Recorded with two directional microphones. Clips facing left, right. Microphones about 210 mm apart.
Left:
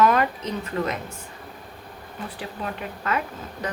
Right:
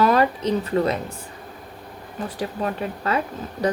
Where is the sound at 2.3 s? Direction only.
40° right (ahead or behind).